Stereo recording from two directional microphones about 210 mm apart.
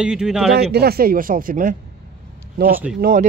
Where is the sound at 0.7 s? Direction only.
50° right (ahead or behind).